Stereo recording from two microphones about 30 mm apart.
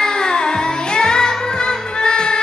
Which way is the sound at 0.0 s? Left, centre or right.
Left.